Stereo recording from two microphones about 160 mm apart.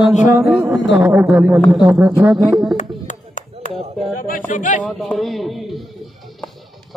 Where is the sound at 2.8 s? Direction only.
50° left (ahead or behind).